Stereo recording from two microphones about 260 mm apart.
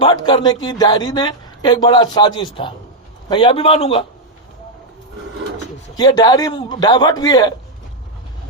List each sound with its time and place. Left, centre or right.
0.0 s a man's voice: centre
6.0 s a man's voice: centre